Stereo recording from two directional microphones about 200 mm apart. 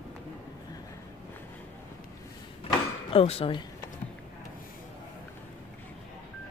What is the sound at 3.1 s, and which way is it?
Speech, 30° left (ahead or behind).